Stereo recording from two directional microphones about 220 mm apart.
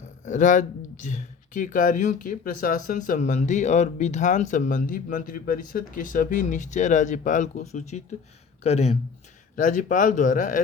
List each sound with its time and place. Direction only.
0.3 s speech: 35° left (ahead or behind)